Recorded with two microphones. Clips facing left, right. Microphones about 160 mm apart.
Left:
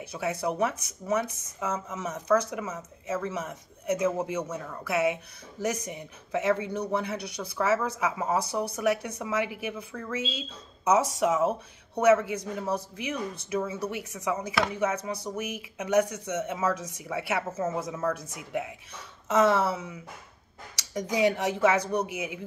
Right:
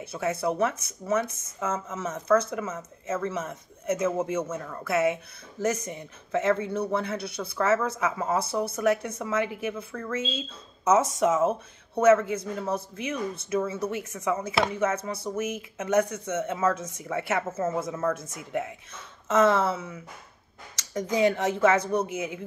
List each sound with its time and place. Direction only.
0.0 s speech: 15° left (ahead or behind)
21.1 s speech: 15° left (ahead or behind)